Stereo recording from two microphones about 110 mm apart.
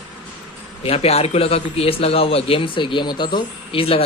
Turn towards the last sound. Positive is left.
turn(degrees=55)  # may be behind; listen again after turning